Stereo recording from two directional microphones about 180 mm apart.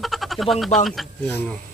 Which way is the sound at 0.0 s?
Centre (ahead or behind).